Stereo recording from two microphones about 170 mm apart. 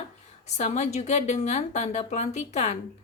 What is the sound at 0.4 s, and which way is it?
Speech, 40° left (ahead or behind).